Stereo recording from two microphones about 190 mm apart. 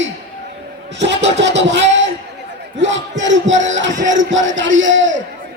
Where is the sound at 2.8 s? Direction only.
75° right (ahead or behind).